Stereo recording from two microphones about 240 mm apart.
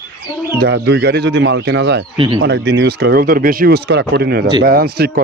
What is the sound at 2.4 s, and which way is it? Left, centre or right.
A man's voice, right.